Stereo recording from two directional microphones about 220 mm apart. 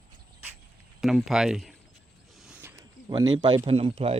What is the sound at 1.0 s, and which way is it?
Speech, centre (ahead or behind).